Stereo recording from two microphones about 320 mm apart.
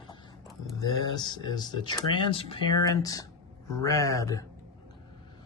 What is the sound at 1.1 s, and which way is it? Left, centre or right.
A man's voice, centre.